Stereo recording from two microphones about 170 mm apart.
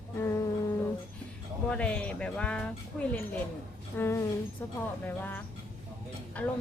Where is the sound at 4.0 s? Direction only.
15° left (ahead or behind).